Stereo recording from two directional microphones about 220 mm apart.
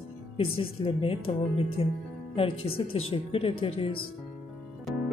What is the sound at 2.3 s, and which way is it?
Speech, 25° left (ahead or behind).